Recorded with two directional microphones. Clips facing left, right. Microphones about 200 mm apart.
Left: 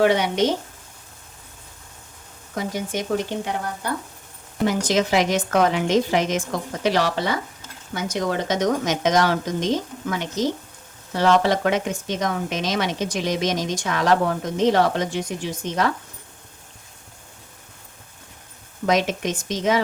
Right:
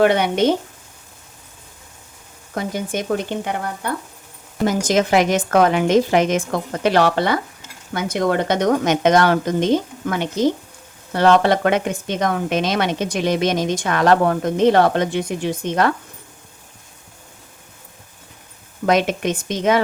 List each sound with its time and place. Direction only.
0.0 s speech: 55° right (ahead or behind)
2.6 s speech: 55° right (ahead or behind)
4.6 s speech: 45° right (ahead or behind)
18.9 s speech: 60° right (ahead or behind)